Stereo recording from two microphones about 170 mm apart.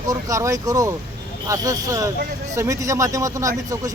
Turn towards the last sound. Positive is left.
turn(degrees=-20)  # may be behind; listen again after turning